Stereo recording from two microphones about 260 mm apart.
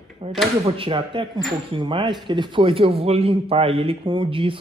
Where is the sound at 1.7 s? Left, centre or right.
Centre.